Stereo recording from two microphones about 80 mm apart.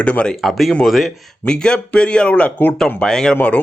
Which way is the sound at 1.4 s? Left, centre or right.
Centre.